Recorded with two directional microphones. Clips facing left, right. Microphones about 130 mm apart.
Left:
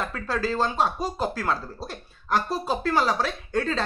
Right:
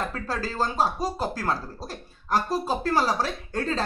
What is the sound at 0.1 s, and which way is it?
Speech, 40° right (ahead or behind).